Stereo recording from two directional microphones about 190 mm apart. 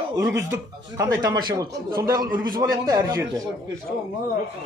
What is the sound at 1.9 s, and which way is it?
Speech, 50° right (ahead or behind).